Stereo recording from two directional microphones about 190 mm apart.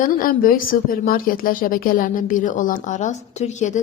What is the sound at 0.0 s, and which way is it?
A woman's voice, 45° left (ahead or behind).